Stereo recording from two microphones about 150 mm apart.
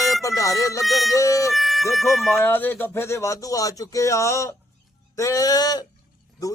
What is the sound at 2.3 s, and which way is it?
A man's voice, 15° left (ahead or behind).